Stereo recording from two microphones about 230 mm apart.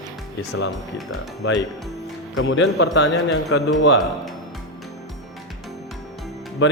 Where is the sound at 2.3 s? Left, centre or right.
Left.